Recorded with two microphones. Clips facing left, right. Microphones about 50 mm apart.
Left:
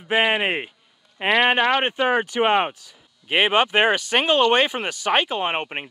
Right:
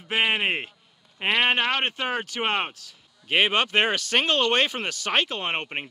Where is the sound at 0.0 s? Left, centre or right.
Centre.